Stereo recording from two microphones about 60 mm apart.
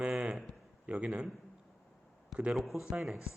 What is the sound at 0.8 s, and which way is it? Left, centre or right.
Speech, right.